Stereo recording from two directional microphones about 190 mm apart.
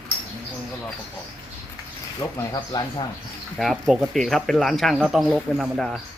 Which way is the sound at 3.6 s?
Centre (ahead or behind).